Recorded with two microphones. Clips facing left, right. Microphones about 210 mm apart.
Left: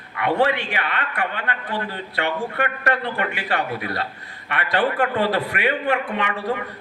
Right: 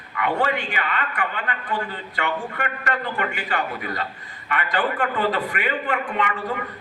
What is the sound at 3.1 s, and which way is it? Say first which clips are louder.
Speech: left 1 dB; 65° left (ahead or behind).